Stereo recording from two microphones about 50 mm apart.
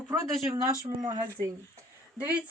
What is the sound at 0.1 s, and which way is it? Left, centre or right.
Speech, right.